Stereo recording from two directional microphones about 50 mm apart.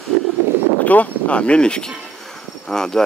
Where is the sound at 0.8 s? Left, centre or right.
Left.